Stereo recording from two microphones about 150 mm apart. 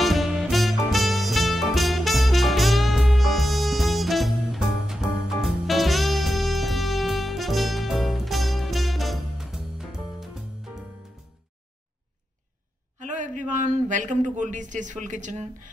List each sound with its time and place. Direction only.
0.0 s music: centre (ahead or behind)
13.0 s a man's voice: 55° right (ahead or behind)